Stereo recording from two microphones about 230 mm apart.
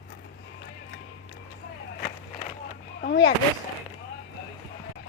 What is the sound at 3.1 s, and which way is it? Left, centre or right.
Speech, left.